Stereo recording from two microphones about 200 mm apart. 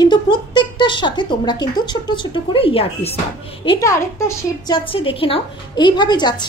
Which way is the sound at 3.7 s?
15° left (ahead or behind).